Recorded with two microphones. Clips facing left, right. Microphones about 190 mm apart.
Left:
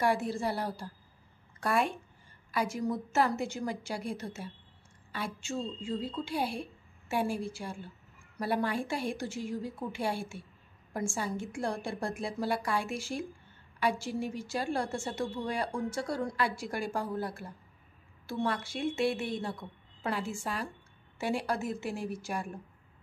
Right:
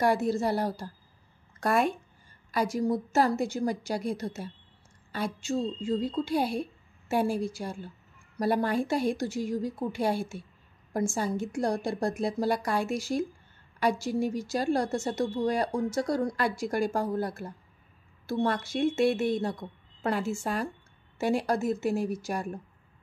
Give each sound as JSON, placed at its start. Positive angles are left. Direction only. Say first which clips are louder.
{"t": 0.0, "sound": "a woman's voice", "louder": "right 4 dB", "side_deg": -40}